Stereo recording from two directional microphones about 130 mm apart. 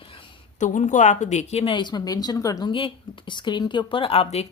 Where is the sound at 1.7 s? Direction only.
35° left (ahead or behind).